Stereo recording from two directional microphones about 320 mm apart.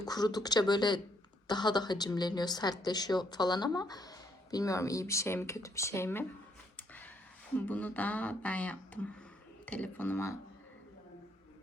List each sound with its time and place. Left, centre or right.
0.0 s a woman's voice: centre
6.7 s a sound: centre
7.5 s speech: centre